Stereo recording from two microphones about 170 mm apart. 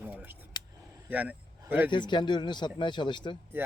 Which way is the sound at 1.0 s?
10° right (ahead or behind).